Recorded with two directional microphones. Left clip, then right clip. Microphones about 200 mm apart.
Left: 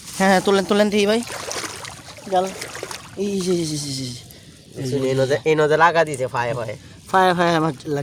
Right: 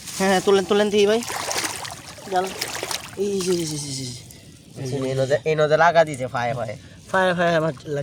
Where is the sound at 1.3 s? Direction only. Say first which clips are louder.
Right 3 dB; 45° right (ahead or behind).